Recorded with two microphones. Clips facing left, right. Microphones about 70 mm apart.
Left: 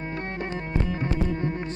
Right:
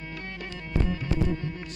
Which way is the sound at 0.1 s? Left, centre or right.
Left.